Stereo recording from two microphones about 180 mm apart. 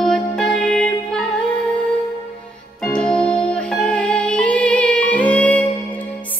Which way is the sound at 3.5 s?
5° left (ahead or behind).